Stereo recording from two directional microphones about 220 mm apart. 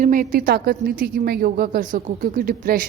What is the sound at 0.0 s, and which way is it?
A woman's voice, 35° right (ahead or behind).